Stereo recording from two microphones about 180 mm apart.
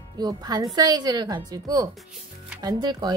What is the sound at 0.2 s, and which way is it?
Speech, 20° right (ahead or behind).